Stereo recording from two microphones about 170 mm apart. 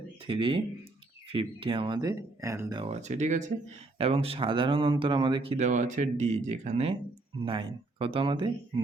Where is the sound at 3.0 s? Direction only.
45° right (ahead or behind).